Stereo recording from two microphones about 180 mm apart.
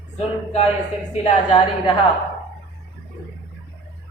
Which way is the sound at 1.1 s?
35° left (ahead or behind).